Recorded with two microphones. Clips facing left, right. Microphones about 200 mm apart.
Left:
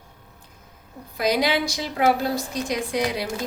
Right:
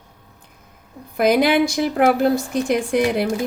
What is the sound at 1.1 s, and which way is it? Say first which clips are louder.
A woman's voice: right 6 dB; 55° right (ahead or behind).